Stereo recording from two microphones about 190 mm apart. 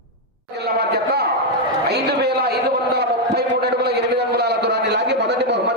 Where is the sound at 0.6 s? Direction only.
55° right (ahead or behind).